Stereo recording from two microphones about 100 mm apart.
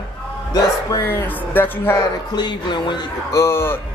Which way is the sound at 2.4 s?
50° left (ahead or behind).